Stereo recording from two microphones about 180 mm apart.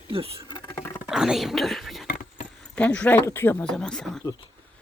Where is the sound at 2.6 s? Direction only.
5° left (ahead or behind).